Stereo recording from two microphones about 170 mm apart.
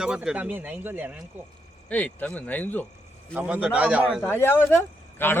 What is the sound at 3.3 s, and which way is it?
Speech, 10° right (ahead or behind).